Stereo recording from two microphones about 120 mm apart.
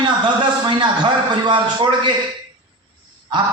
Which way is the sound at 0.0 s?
40° right (ahead or behind).